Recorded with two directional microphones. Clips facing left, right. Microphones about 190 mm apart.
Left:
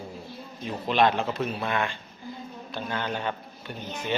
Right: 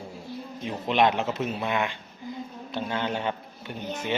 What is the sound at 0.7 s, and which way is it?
Speech, 20° right (ahead or behind).